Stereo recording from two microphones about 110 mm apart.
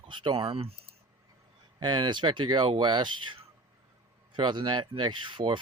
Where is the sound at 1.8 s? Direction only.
40° right (ahead or behind).